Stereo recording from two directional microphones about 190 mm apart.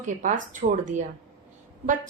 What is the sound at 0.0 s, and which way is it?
A woman's voice, 40° right (ahead or behind).